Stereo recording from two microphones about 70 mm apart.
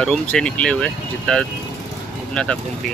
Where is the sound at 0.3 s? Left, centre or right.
Centre.